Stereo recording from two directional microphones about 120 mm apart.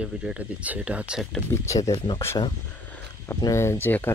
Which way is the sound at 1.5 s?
25° left (ahead or behind).